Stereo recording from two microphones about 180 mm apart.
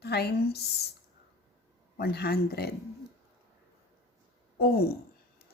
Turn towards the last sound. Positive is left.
turn(degrees=60)  # may be behind; listen again after turning